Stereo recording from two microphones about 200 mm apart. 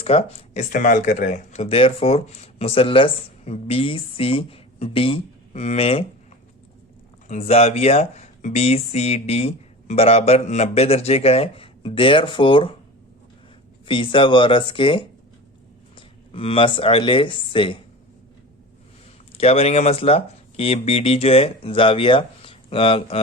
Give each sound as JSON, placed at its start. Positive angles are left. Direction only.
{"t": 0.0, "sound": "speech", "side_deg": 30}
{"t": 7.3, "sound": "speech", "side_deg": 35}
{"t": 13.8, "sound": "speech", "side_deg": 25}
{"t": 19.3, "sound": "speech", "side_deg": 30}